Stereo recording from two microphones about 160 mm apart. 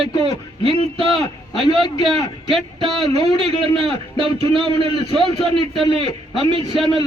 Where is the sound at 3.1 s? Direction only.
35° right (ahead or behind).